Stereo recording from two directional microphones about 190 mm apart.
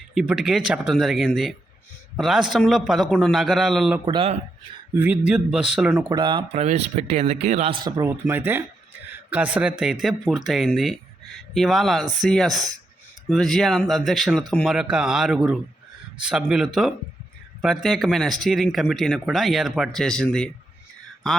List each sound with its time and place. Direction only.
0.1 s speech: centre (ahead or behind)
4.0 s speech: 30° right (ahead or behind)
5.3 s speech: 5° right (ahead or behind)
6.1 s speech: 25° right (ahead or behind); by 20.5 s 5° left (ahead or behind)